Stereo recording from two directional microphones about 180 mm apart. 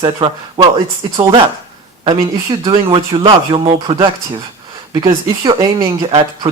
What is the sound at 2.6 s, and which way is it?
A man's voice, 30° right (ahead or behind).